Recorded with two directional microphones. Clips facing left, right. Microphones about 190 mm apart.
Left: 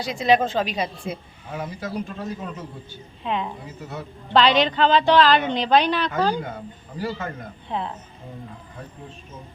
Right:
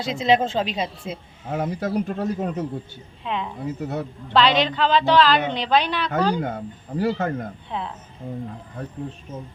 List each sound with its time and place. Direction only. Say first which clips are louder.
0.0 s speech: even; 25° right (ahead or behind)
1.5 s speech: right 6 dB; 55° right (ahead or behind)
3.2 s a woman's voice: left 1 dB; centre (ahead or behind)
3.8 s speech: right 7 dB; 60° right (ahead or behind)
4.4 s a woman's voice: left 1 dB; centre (ahead or behind)
6.4 s speech: right 5 dB; 55° right (ahead or behind)
7.7 s a woman's voice: left 4 dB; centre (ahead or behind)